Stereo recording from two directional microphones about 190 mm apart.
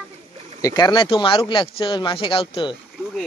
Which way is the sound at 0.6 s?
20° left (ahead or behind).